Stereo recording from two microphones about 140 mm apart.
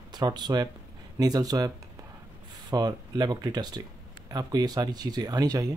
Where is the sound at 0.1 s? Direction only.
30° right (ahead or behind).